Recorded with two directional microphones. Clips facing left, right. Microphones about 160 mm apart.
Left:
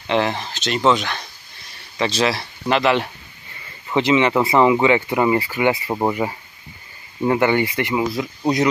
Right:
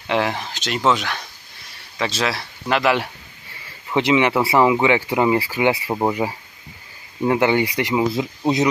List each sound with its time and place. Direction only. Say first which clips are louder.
0.0 s speech: left 1 dB; 10° right (ahead or behind)